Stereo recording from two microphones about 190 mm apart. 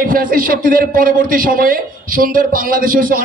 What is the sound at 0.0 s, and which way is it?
A man's voice, 50° right (ahead or behind).